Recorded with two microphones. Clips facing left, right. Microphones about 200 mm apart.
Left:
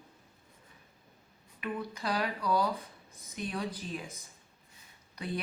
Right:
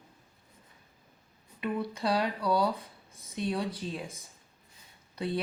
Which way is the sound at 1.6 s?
30° right (ahead or behind).